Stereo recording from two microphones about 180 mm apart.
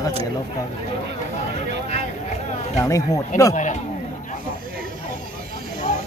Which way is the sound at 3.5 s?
45° left (ahead or behind).